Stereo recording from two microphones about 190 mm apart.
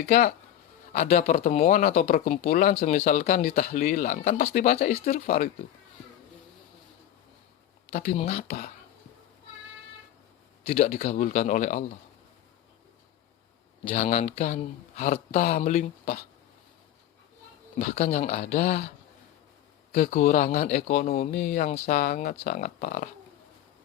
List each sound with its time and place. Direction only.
0.1 s speech: 45° left (ahead or behind)
7.9 s speech: 45° left (ahead or behind)
10.7 s speech: 45° left (ahead or behind)
13.8 s speech: 45° left (ahead or behind)
17.7 s speech: 40° left (ahead or behind)
19.9 s speech: 40° left (ahead or behind)